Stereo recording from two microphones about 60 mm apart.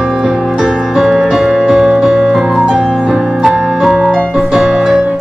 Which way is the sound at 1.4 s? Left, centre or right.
Centre.